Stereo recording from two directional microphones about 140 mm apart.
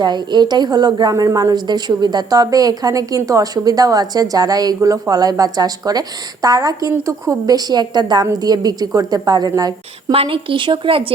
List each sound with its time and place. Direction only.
0.0 s a woman's voice: 30° right (ahead or behind)
10.1 s speech: 40° right (ahead or behind)